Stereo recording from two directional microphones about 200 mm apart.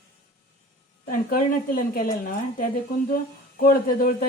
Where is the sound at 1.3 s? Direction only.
45° left (ahead or behind).